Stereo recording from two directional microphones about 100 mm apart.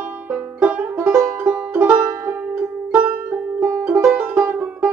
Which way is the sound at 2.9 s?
15° right (ahead or behind).